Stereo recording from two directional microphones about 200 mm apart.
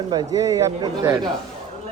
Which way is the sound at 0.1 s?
20° right (ahead or behind).